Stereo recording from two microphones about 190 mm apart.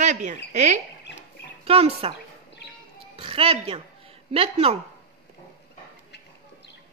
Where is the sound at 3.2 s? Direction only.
30° right (ahead or behind).